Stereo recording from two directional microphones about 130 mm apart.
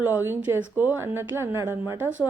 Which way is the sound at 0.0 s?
20° right (ahead or behind).